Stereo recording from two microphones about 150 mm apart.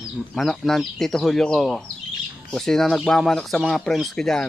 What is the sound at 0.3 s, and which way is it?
Speech, centre (ahead or behind).